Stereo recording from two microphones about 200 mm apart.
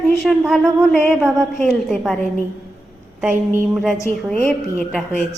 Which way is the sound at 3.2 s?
5° right (ahead or behind).